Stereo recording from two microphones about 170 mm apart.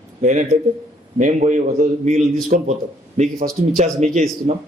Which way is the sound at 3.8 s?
45° right (ahead or behind).